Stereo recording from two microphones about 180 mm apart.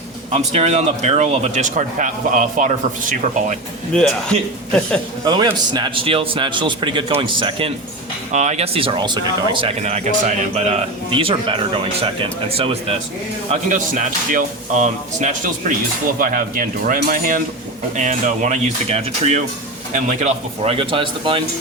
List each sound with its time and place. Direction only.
0.3 s a man's voice: 35° right (ahead or behind)
3.9 s a man's voice: 5° left (ahead or behind)
5.2 s a man's voice: 25° right (ahead or behind)
8.3 s a man's voice: 40° right (ahead or behind)
9.8 s a man's voice: 40° right (ahead or behind)
13.5 s a man's voice: 45° right (ahead or behind); by 21.4 s 30° right (ahead or behind)